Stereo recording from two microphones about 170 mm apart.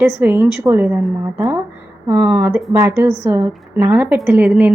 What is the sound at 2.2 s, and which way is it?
A woman's voice, 10° right (ahead or behind).